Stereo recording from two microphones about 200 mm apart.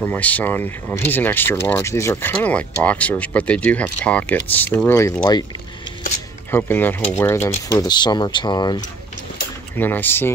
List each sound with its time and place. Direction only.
0.0 s speech: 10° left (ahead or behind)
6.5 s speech: 10° left (ahead or behind)
9.8 s speech: 10° left (ahead or behind)